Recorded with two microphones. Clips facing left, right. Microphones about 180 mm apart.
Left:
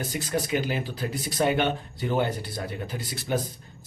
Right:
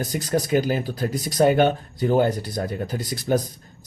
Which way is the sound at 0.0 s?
40° right (ahead or behind).